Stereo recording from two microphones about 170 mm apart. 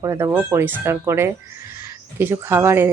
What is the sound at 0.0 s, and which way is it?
Speech, 15° right (ahead or behind).